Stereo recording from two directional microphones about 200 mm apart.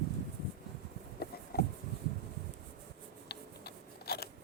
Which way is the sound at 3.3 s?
50° left (ahead or behind).